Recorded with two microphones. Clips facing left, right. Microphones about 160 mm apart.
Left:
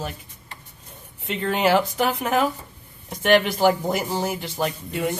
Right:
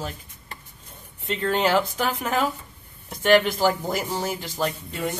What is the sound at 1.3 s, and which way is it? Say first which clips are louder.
Speech: left 1 dB; 15° left (ahead or behind).